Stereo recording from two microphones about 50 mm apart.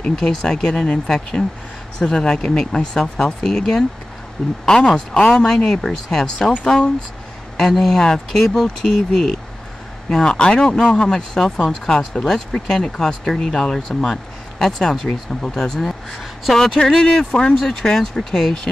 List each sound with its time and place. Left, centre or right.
0.0 s speech: centre
7.5 s a woman's voice: centre
10.0 s speech: centre